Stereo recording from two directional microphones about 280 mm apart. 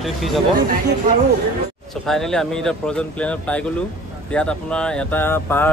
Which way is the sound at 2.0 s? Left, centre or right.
Centre.